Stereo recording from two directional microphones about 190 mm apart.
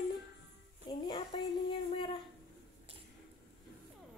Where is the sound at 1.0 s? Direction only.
25° left (ahead or behind).